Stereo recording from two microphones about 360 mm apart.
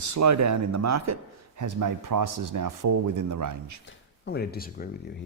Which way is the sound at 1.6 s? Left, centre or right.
Right.